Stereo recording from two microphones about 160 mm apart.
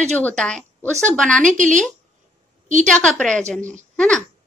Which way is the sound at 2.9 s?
5° left (ahead or behind).